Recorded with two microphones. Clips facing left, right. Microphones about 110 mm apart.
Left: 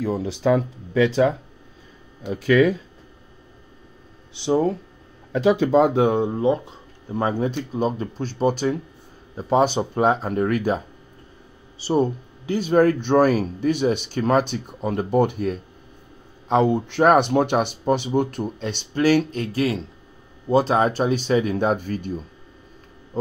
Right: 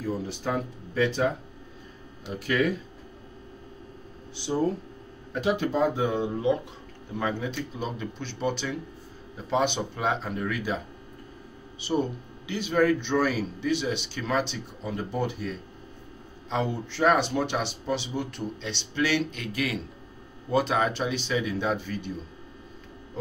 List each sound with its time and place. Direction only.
0.0 s speech: 90° left
4.5 s speech: 90° left; by 6.3 s 55° left (ahead or behind)
6.3 s a man's voice: 35° left (ahead or behind)
11.8 s a man's voice: 35° left (ahead or behind)